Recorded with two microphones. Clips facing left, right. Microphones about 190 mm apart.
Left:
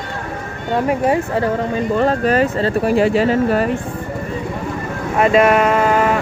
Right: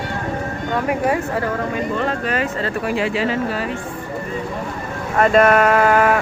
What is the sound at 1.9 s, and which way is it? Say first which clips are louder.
Speech: left 10 dB; 40° left (ahead or behind).